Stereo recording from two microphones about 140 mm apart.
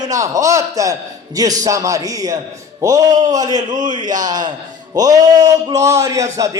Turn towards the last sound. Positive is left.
turn(degrees=-20)  # may be behind; listen again after turning